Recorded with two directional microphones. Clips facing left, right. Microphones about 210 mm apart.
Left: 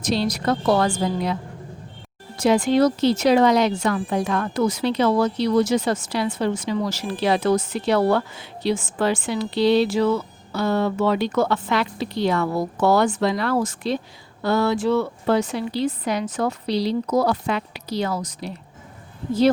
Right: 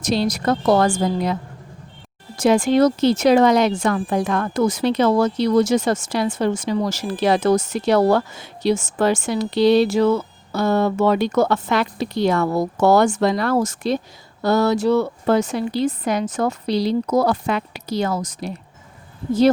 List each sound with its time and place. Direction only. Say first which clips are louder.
0.0 s speech: right 2 dB; 45° right (ahead or behind)
2.4 s speech: right 2 dB; 50° right (ahead or behind)